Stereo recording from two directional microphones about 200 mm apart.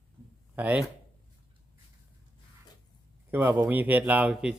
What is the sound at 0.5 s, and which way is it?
Speech, 5° right (ahead or behind).